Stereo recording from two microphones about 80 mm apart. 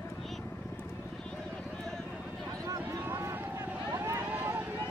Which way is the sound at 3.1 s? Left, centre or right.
Right.